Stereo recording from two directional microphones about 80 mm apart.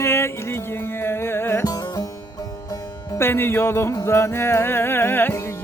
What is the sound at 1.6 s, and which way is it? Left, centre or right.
Music, left.